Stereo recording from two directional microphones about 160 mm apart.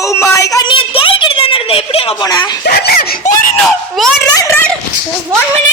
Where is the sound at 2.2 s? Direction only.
25° left (ahead or behind).